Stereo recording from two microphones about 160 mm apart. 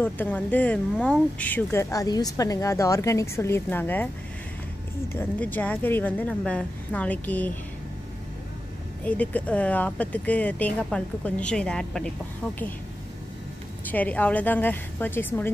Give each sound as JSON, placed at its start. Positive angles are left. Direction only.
{"t": 0.0, "sound": "speech", "side_deg": 10}
{"t": 5.1, "sound": "speech", "side_deg": 10}
{"t": 9.0, "sound": "speech", "side_deg": 10}
{"t": 13.8, "sound": "speech", "side_deg": 10}